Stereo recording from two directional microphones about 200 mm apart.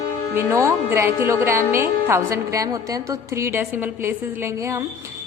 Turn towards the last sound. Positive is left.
turn(degrees=-15)  # may be behind; listen again after turning